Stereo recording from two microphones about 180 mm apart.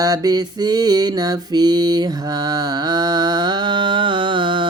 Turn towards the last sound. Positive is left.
turn(degrees=-25)  # may be behind; listen again after turning